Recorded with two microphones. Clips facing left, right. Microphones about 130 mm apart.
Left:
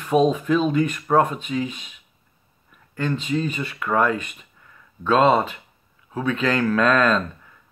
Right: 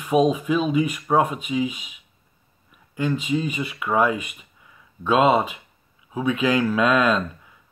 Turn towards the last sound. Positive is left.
turn(degrees=-10)  # may be behind; listen again after turning